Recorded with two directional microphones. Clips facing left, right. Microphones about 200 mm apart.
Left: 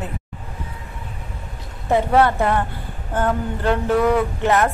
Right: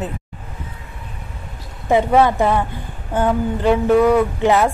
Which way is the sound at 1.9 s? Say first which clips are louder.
Right 2 dB; 10° right (ahead or behind).